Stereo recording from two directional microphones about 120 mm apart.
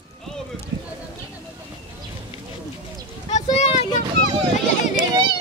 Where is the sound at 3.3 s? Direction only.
75° left (ahead or behind).